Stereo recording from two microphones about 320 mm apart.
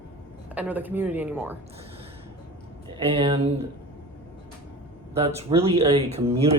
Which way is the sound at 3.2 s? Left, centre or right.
Centre.